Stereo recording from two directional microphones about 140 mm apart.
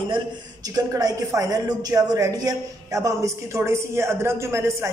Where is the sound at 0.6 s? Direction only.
25° right (ahead or behind).